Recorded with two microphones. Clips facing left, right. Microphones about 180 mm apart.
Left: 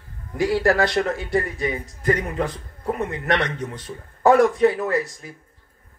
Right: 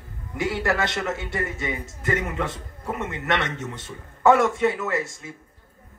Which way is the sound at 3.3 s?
25° right (ahead or behind).